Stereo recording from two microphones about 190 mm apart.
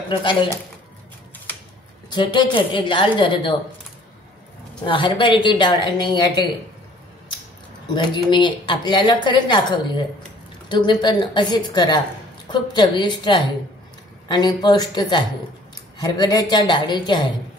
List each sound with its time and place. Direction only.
0.1 s speech: 25° left (ahead or behind)
2.0 s speech: 25° left (ahead or behind)
4.8 s speech: 25° left (ahead or behind)
7.9 s speech: 25° left (ahead or behind)